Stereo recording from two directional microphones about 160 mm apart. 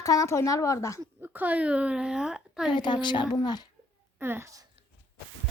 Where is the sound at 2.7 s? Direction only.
30° left (ahead or behind).